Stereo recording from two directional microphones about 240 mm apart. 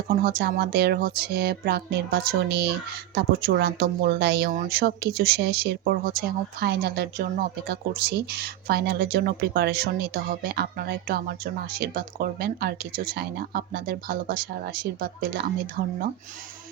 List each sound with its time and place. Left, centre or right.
0.1 s speech: right